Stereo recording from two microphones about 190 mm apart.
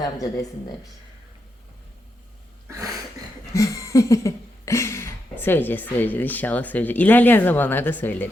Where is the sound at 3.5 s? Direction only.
15° left (ahead or behind).